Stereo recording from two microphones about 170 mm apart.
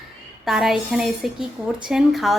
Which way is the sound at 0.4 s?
Centre (ahead or behind).